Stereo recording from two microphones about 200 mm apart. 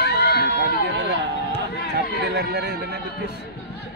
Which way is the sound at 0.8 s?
60° right (ahead or behind).